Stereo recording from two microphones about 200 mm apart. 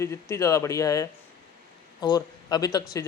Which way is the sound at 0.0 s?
15° left (ahead or behind).